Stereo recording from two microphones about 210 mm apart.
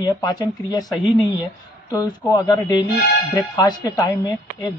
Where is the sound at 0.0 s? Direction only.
20° left (ahead or behind).